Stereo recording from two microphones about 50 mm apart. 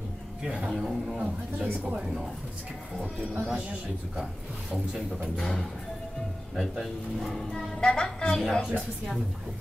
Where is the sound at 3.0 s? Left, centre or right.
Centre.